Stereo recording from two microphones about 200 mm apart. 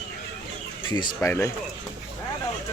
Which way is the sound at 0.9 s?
20° left (ahead or behind).